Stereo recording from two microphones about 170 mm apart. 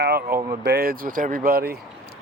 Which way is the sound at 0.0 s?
65° right (ahead or behind).